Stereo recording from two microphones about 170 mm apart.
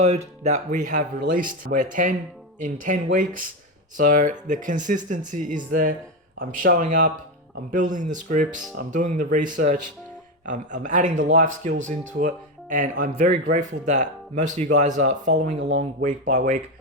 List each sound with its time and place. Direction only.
0.0 s speech: 40° right (ahead or behind)